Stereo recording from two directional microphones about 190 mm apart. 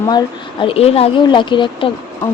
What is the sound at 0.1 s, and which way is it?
Speech, 25° left (ahead or behind).